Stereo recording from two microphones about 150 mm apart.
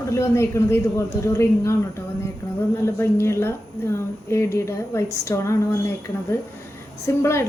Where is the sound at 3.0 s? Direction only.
15° left (ahead or behind).